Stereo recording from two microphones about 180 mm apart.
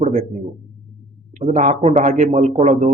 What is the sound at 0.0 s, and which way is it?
Speech, 40° right (ahead or behind).